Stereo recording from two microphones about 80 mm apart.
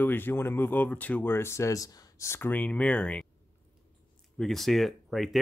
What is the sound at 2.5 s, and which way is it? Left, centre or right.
Speech, centre.